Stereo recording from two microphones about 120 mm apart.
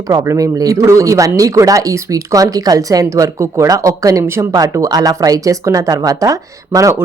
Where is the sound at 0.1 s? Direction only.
30° right (ahead or behind).